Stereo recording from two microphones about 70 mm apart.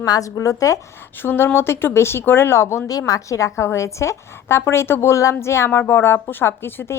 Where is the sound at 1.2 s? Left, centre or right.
Left.